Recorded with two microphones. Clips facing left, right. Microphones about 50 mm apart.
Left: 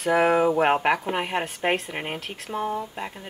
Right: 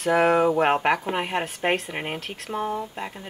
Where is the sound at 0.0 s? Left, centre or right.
Centre.